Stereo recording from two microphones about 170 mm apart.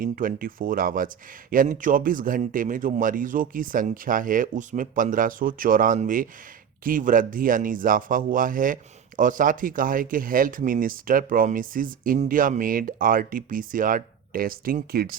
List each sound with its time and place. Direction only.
0.0 s speech: 55° right (ahead or behind)